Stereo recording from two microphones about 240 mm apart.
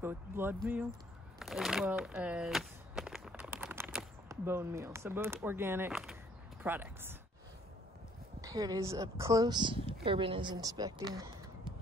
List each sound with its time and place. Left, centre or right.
0.0 s speech: centre
1.4 s a sound: centre
4.3 s speech: centre
8.4 s speech: centre